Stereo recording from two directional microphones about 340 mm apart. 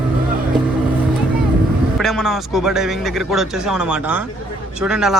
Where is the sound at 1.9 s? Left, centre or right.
Centre.